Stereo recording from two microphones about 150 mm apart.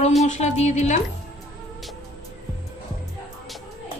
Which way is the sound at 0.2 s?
50° left (ahead or behind).